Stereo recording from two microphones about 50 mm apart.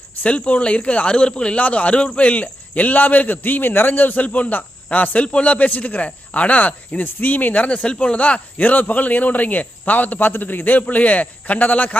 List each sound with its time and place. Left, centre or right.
0.2 s a man's voice: left